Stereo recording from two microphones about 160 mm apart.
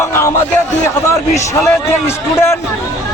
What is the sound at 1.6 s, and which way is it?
Speech, 15° left (ahead or behind).